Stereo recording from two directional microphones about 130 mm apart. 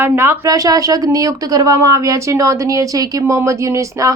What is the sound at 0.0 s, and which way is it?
Speech, 20° right (ahead or behind).